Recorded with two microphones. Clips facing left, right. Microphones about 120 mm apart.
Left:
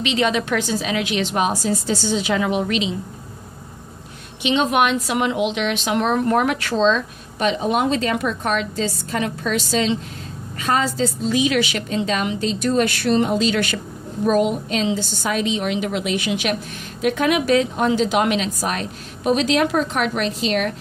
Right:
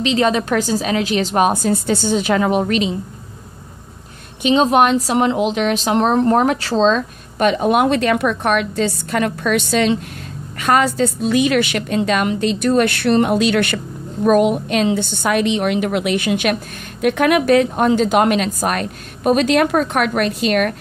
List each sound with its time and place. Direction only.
0.0 s a woman's voice: 40° right (ahead or behind)
4.4 s a woman's voice: 40° right (ahead or behind); by 20.7 s 55° right (ahead or behind)